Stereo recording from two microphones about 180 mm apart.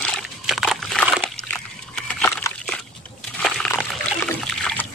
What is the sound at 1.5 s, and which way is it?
Slosh, 5° left (ahead or behind).